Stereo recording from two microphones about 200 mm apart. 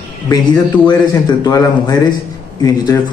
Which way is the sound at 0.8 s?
20° left (ahead or behind).